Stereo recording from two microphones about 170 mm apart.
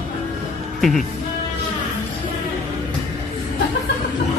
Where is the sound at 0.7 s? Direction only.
Centre (ahead or behind).